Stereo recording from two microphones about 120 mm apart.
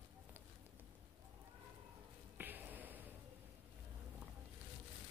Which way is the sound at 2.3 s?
15° right (ahead or behind).